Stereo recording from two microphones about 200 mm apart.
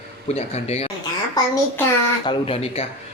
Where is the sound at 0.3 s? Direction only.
30° left (ahead or behind).